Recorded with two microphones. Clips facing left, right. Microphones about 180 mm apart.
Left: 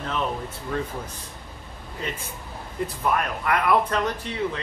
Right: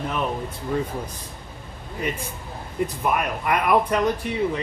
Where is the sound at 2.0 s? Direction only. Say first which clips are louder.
Right 4 dB; 15° right (ahead or behind).